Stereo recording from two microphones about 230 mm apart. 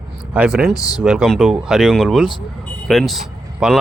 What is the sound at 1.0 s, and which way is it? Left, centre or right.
Speech, centre.